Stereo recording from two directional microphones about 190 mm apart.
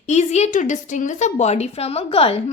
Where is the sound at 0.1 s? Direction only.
35° left (ahead or behind).